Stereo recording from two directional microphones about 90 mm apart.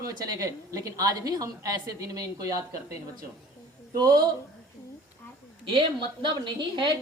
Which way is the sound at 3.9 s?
50° right (ahead or behind).